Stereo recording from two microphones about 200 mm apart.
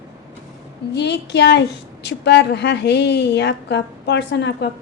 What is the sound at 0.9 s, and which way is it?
Speech, 60° left (ahead or behind).